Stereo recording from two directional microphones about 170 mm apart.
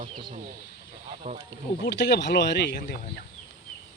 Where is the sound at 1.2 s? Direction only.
40° right (ahead or behind).